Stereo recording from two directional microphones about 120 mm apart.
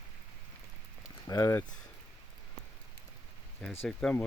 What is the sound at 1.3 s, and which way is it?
Speech, 30° left (ahead or behind).